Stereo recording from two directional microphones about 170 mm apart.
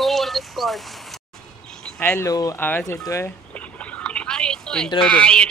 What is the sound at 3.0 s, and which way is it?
Speech, 20° left (ahead or behind).